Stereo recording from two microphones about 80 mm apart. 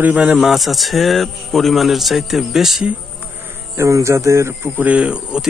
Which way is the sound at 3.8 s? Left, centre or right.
Right.